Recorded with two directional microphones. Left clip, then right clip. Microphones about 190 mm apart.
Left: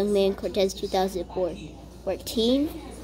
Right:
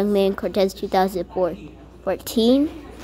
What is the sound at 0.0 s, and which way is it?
A woman's voice, 20° right (ahead or behind).